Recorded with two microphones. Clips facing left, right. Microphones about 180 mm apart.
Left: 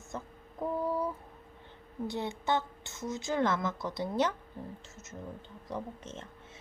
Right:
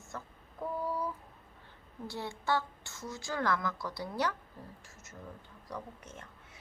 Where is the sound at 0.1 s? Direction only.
20° left (ahead or behind).